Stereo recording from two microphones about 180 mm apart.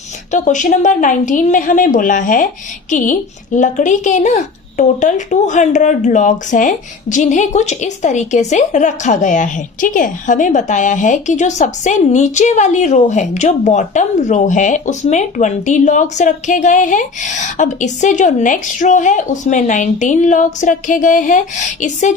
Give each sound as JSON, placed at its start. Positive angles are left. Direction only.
{"t": 0.3, "sound": "speech", "side_deg": 45}